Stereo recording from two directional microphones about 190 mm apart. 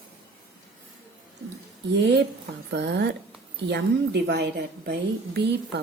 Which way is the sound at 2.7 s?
65° right (ahead or behind).